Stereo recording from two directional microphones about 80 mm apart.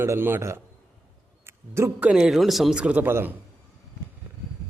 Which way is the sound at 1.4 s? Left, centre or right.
Right.